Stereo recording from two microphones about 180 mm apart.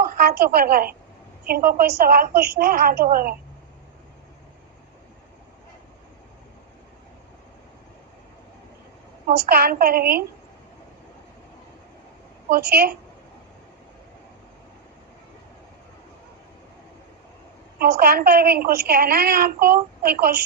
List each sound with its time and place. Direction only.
0.0 s a woman's voice: 55° right (ahead or behind)
9.5 s a woman's voice: 55° right (ahead or behind)
12.5 s a woman's voice: 55° right (ahead or behind)
18.0 s a woman's voice: 55° right (ahead or behind)